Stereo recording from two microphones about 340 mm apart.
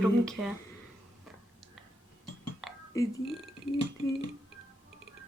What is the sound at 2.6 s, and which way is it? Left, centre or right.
Whispering, centre.